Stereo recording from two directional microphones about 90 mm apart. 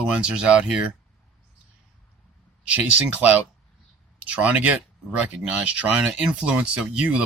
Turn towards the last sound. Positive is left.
turn(degrees=-15)  # may be behind; listen again after turning